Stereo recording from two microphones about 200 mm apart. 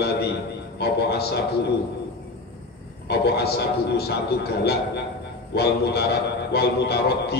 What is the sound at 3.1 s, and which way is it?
A man's voice, 55° left (ahead or behind).